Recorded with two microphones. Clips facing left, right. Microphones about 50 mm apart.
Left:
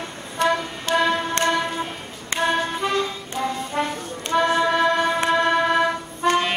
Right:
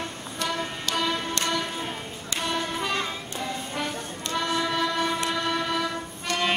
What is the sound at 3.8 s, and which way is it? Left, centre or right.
Music, left.